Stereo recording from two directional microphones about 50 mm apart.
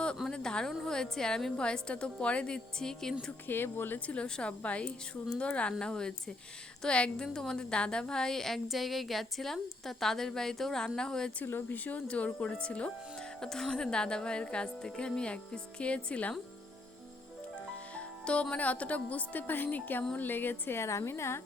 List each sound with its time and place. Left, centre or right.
0.3 s a sound: centre
0.9 s a woman's voice: centre
2.7 s a woman's voice: centre
3.4 s a woman's voice: left
4.1 s a woman's voice: left
11.4 s speech: left
11.9 s speech: left
13.4 s speech: centre
17.9 s music: left
18.5 s a woman's voice: left
20.7 s a woman's voice: left